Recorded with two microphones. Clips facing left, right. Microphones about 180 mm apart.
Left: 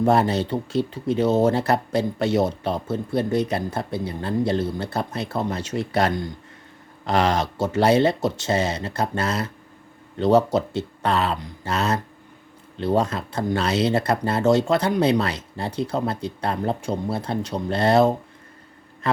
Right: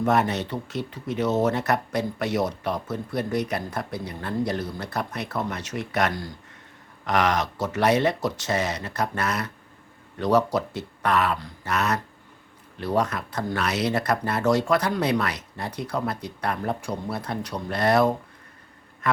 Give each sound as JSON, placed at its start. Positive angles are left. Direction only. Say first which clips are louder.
{"t": 0.0, "sound": "speech", "louder": "left 4 dB", "side_deg": 30}